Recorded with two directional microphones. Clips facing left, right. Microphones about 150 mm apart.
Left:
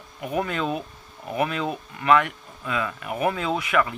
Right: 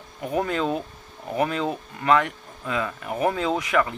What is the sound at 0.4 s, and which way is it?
Speech, 35° right (ahead or behind).